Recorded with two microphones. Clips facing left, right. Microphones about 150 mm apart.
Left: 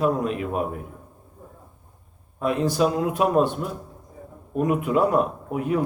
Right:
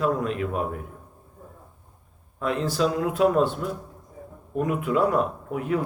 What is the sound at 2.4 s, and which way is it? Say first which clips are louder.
A man's voice: left 3 dB; 15° left (ahead or behind).